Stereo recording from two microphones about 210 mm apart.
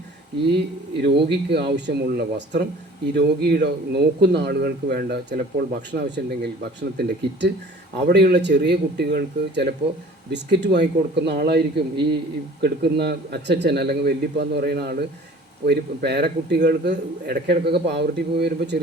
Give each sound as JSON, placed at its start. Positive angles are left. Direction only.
{"t": 0.5, "sound": "a man's voice", "side_deg": -55}
{"t": 8.0, "sound": "a man's voice", "side_deg": -55}